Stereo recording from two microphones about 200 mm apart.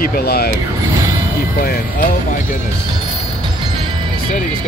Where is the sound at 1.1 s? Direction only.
45° left (ahead or behind).